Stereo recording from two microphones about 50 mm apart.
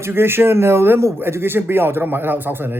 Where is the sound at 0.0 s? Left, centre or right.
Right.